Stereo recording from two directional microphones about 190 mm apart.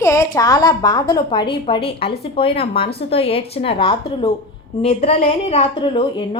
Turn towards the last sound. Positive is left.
turn(degrees=25)  # may be behind; listen again after turning